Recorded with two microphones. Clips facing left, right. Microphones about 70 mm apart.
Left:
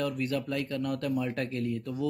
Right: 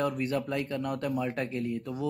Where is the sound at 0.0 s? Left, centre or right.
Right.